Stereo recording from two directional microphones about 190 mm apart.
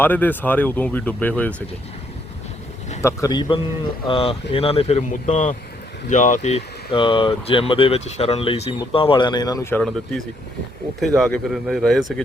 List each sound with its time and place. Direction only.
0.0 s speech: 10° left (ahead or behind)
3.0 s speech: 15° left (ahead or behind)
11.0 s speech: centre (ahead or behind)